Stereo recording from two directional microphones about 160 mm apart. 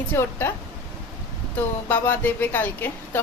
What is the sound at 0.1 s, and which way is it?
Speech, 15° left (ahead or behind).